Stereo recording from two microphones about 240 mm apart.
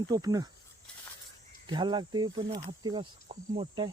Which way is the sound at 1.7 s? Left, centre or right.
Centre.